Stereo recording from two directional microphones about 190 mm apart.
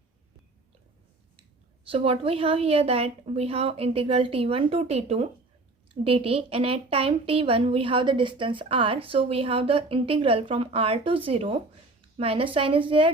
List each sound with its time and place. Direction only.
1.8 s a woman's voice: 30° right (ahead or behind)